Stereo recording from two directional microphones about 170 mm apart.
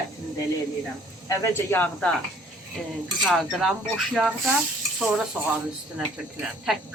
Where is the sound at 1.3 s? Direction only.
15° left (ahead or behind).